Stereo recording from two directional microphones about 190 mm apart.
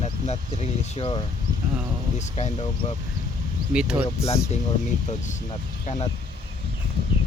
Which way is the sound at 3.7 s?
5° right (ahead or behind).